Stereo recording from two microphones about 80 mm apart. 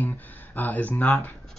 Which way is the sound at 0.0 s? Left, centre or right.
Left.